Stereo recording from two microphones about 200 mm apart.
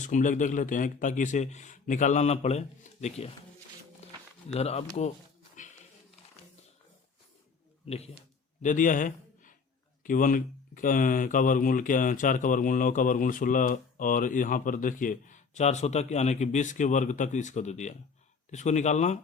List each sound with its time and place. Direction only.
0.0 s speech: 40° left (ahead or behind)
7.9 s a man's voice: 30° left (ahead or behind)